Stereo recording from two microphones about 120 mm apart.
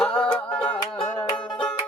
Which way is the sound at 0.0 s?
10° left (ahead or behind).